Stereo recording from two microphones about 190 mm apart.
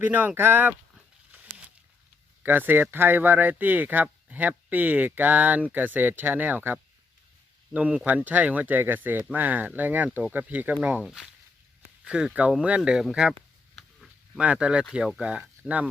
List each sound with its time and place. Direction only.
0.0 s speech: 10° right (ahead or behind)
2.4 s speech: 10° right (ahead or behind)